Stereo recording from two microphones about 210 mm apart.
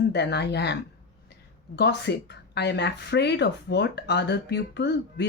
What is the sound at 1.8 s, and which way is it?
Speech, 55° left (ahead or behind).